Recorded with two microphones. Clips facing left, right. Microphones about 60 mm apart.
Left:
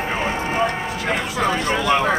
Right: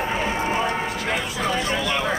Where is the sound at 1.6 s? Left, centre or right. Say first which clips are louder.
Left 5 dB; left.